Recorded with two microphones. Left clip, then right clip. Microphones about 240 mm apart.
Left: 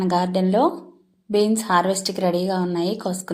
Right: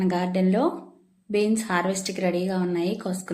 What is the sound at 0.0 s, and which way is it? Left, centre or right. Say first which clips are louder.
A woman's voice: left 4 dB; centre.